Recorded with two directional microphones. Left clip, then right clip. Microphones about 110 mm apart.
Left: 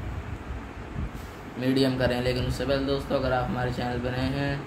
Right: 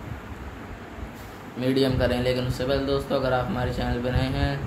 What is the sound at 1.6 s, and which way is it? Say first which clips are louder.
Speech: right 2 dB; 10° right (ahead or behind).